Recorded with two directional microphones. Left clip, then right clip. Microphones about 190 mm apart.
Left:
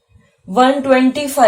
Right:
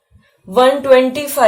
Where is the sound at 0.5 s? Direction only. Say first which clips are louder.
Right 2 dB; 40° right (ahead or behind).